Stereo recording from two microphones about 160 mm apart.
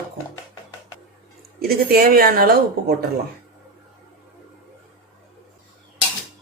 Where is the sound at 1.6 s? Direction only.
70° right (ahead or behind).